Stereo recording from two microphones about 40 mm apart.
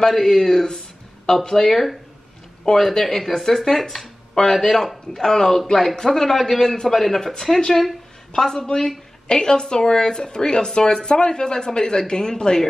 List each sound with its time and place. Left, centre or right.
0.0 s a man's voice: centre
8.5 s speech: left